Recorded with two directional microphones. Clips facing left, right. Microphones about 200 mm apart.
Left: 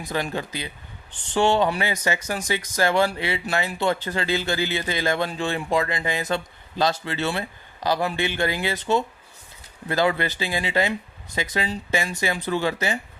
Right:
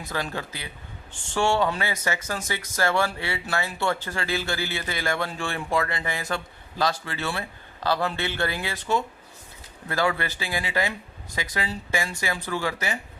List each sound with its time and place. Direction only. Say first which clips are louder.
0.0 s speech: left 3 dB; 15° left (ahead or behind)